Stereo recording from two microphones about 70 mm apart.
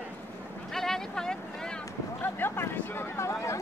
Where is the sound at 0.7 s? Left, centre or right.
Centre.